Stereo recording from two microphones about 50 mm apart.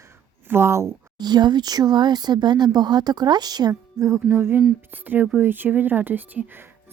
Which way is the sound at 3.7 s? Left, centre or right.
Right.